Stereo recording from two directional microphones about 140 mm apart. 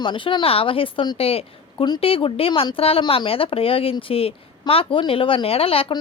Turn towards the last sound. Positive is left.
turn(degrees=40)  # may be behind; listen again after turning